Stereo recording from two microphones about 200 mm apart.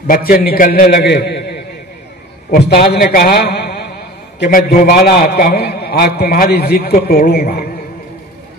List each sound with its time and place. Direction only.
0.0 s a man's voice: 45° left (ahead or behind)